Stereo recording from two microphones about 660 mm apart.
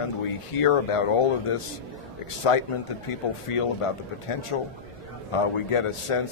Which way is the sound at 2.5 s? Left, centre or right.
Left.